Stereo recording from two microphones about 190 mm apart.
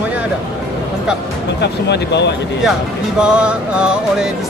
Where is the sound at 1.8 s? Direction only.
65° left (ahead or behind).